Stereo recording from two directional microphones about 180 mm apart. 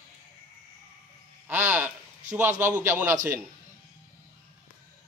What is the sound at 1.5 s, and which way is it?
Speech, 10° right (ahead or behind).